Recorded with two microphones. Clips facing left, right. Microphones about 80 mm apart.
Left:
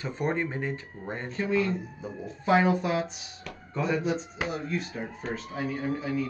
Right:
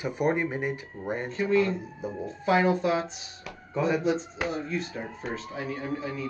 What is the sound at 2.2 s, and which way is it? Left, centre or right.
Speech, centre.